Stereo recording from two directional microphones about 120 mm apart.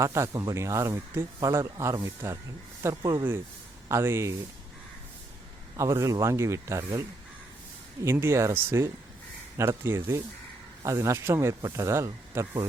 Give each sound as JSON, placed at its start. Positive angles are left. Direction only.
{"t": 0.0, "sound": "speech", "side_deg": -25}
{"t": 5.7, "sound": "speech", "side_deg": -25}
{"t": 8.0, "sound": "speech", "side_deg": -20}